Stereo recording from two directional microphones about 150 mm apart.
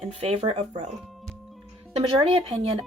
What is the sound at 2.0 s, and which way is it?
Speech, 35° right (ahead or behind).